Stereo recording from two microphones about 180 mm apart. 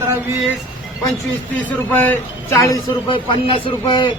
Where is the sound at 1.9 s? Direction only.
10° left (ahead or behind).